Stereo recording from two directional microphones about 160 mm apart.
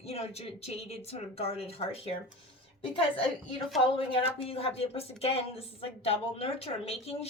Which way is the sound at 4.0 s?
35° left (ahead or behind).